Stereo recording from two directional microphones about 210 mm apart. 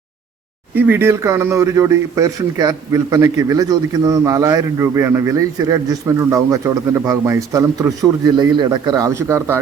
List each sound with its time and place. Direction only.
0.8 s a man's voice: 10° right (ahead or behind)